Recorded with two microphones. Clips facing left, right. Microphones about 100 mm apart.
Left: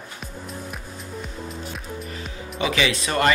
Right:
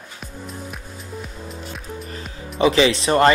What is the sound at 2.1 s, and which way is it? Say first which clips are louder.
Speech: even; 35° right (ahead or behind).